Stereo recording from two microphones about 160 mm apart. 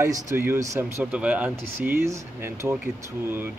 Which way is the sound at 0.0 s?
15° right (ahead or behind).